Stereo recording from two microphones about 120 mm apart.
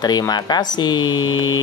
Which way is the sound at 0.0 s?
35° left (ahead or behind).